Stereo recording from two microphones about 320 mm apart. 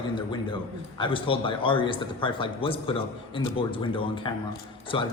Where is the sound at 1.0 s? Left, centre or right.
Centre.